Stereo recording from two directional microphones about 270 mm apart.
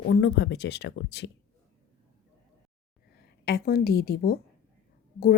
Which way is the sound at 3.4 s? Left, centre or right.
Left.